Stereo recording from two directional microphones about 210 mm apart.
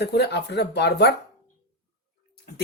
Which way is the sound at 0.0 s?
50° left (ahead or behind).